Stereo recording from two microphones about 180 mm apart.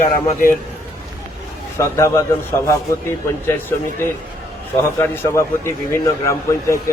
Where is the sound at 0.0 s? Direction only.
50° left (ahead or behind).